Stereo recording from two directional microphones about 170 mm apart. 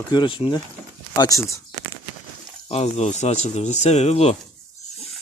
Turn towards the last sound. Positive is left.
turn(degrees=40)  # may be behind; listen again after turning